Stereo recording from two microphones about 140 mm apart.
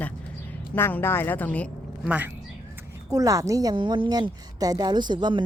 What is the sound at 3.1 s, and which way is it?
A woman's voice, 25° right (ahead or behind).